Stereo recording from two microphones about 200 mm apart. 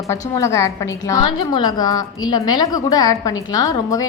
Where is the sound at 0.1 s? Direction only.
15° left (ahead or behind).